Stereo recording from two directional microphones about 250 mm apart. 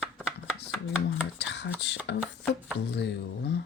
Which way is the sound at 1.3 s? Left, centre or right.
Left.